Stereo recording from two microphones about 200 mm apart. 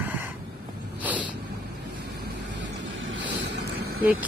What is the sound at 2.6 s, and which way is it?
Vehicle, 70° right (ahead or behind).